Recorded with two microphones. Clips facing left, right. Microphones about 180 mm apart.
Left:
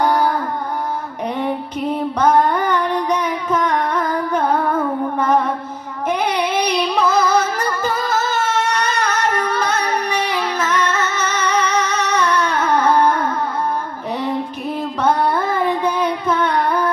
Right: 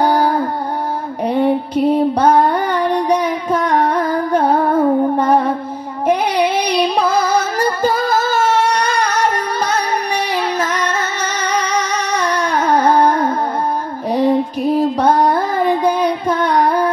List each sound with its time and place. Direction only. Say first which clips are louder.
0.0 s music: right 3 dB; 30° right (ahead or behind)
6.3 s carnatic music: right 3 dB; 10° right (ahead or behind)
7.2 s music: right 2 dB; 30° right (ahead or behind)
9.4 s music: right 1 dB; 35° right (ahead or behind)
12.1 s a sound: even; 35° right (ahead or behind)
12.6 s music: right 3 dB; 35° right (ahead or behind)
16.1 s carnatic music: right 2 dB; 35° right (ahead or behind)